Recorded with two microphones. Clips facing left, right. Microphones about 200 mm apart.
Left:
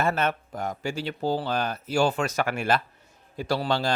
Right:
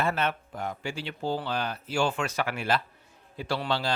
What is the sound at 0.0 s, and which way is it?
Speech, 45° left (ahead or behind).